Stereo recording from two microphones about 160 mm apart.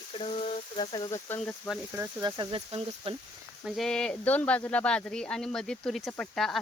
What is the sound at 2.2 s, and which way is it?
Speech, 25° right (ahead or behind).